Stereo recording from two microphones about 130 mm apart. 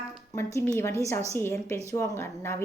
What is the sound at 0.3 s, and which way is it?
A woman's voice, 20° left (ahead or behind).